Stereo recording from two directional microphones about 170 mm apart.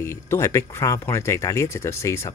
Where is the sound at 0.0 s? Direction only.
15° left (ahead or behind).